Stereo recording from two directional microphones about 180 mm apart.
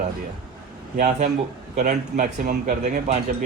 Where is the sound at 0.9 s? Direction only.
40° right (ahead or behind).